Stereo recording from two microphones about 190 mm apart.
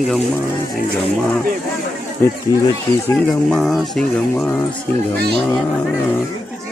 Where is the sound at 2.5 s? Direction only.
20° left (ahead or behind).